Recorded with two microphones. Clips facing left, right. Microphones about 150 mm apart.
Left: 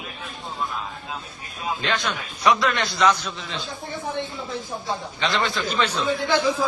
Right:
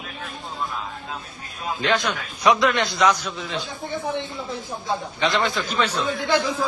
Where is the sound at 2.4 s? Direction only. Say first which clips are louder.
Right 2 dB; 20° right (ahead or behind).